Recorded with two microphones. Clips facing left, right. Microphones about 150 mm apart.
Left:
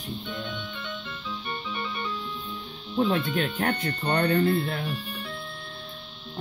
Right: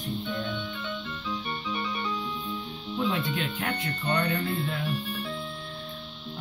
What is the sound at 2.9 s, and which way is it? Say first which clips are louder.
Speech: left 4 dB; 40° left (ahead or behind).